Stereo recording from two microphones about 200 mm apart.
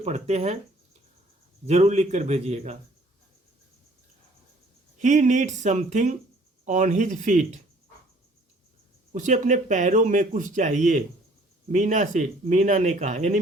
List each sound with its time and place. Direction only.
0.0 s speech: 35° right (ahead or behind)
1.6 s speech: 35° right (ahead or behind)
4.9 s speech: 40° right (ahead or behind)
9.1 s speech: 40° right (ahead or behind)